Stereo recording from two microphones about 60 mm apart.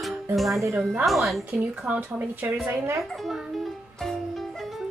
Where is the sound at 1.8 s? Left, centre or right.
Right.